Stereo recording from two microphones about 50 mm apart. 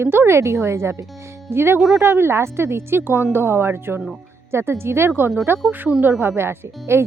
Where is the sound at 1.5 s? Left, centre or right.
Right.